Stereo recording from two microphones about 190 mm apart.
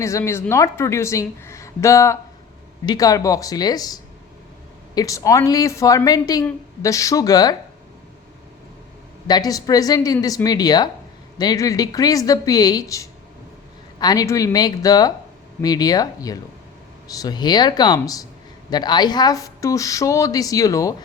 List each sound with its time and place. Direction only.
0.0 s a woman's voice: 15° left (ahead or behind)
9.2 s a woman's voice: 20° left (ahead or behind)